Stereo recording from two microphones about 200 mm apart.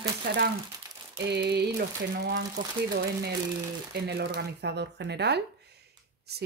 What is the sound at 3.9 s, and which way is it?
Speech, 55° right (ahead or behind).